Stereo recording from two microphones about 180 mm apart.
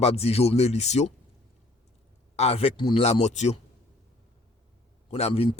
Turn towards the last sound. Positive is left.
turn(degrees=35)  # may be behind; listen again after turning